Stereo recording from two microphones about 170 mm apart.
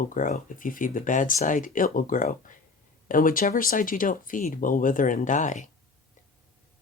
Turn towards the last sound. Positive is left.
turn(degrees=45)  # may be behind; listen again after turning